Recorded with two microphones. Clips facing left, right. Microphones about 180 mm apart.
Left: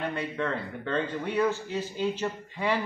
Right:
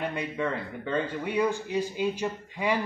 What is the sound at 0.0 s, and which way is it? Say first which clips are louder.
Speech: right 1 dB; 15° right (ahead or behind).